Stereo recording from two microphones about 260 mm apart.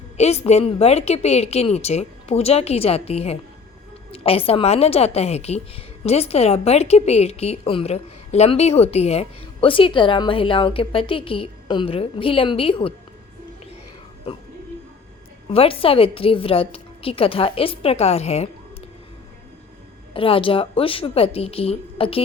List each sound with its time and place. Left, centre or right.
0.2 s a woman's voice: left
15.4 s a woman's voice: left
20.1 s a woman's voice: left